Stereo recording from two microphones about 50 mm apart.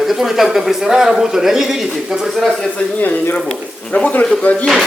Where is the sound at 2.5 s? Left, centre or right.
Centre.